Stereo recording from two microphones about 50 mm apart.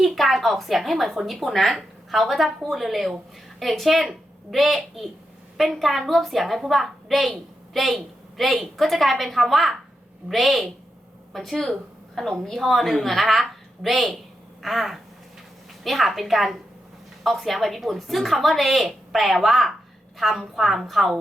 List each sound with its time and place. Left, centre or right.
0.0 s a woman's voice: centre